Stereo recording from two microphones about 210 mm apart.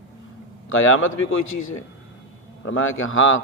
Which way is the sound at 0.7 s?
70° left (ahead or behind).